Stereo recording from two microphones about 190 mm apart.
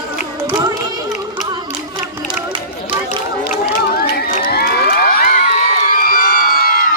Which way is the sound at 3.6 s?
55° left (ahead or behind).